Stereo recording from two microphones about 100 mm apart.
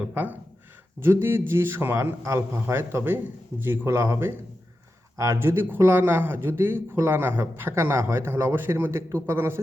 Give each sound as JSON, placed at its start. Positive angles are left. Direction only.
{"t": 0.1, "sound": "speech", "side_deg": -15}